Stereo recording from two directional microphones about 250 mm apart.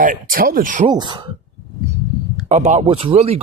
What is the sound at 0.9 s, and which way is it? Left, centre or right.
Speech, centre.